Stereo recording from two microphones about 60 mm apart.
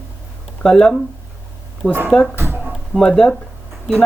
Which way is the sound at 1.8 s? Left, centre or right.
Left.